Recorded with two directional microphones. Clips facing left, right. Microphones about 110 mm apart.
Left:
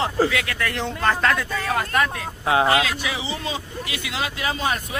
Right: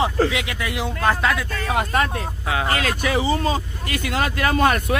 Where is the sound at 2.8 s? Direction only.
50° right (ahead or behind).